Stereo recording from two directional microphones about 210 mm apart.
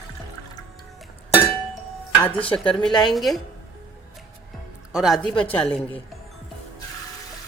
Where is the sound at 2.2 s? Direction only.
10° left (ahead or behind).